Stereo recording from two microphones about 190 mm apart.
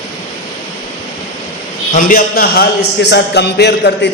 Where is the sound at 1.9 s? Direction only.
50° left (ahead or behind).